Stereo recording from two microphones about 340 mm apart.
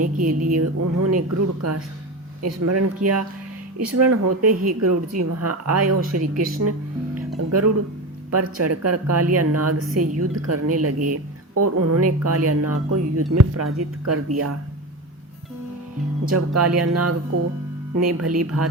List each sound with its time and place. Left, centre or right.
0.3 s a sound: right
0.5 s a woman's voice: right
16.3 s a woman's voice: right